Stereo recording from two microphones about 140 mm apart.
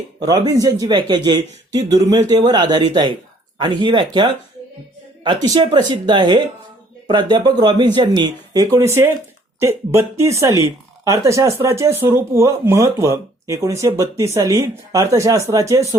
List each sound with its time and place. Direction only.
0.2 s speech: 25° right (ahead or behind)